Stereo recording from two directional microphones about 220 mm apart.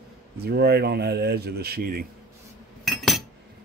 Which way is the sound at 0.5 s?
45° right (ahead or behind).